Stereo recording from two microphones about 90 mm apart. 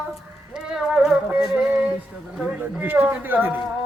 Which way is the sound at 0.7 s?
10° right (ahead or behind).